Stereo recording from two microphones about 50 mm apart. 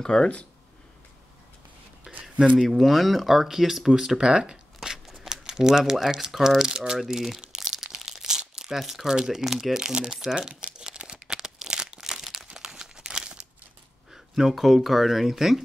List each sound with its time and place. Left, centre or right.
0.0 s speech: centre
2.1 s a sound: centre
2.5 s speech: centre
4.8 s a sound: centre
5.2 s crumpling: centre
5.9 s speech: centre
7.4 s crumpling: centre
8.7 s speech: centre
10.8 s crumpling: centre
14.1 s speech: centre